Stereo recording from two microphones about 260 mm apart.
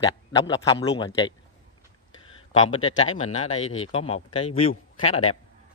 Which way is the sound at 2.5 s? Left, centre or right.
Centre.